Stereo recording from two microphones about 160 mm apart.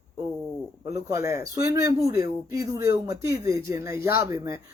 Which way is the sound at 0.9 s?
15° right (ahead or behind).